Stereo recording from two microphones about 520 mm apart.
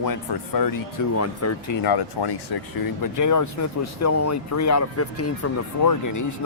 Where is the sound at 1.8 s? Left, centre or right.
Left.